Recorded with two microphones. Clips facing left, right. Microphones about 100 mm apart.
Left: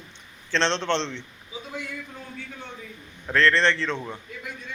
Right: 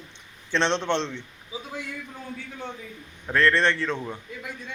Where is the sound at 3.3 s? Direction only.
10° right (ahead or behind).